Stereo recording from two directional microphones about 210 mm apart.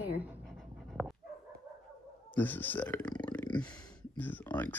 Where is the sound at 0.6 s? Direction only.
Centre (ahead or behind).